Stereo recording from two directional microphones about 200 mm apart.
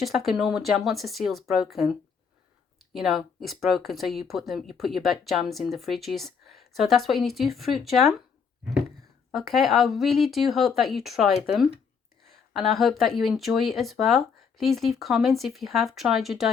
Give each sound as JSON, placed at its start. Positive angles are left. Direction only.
{"t": 0.0, "sound": "speech", "side_deg": 0}
{"t": 9.3, "sound": "speech", "side_deg": 0}